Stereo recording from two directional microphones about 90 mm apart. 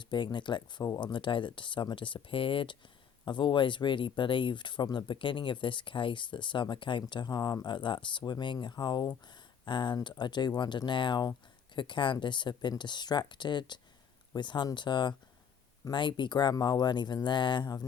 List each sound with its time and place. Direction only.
0.0 s speech: 60° left (ahead or behind)